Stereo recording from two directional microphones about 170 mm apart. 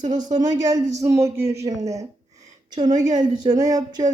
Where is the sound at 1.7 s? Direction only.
40° right (ahead or behind).